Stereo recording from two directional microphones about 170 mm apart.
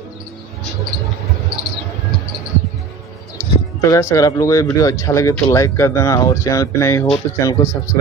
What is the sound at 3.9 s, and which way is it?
Speech, 20° left (ahead or behind).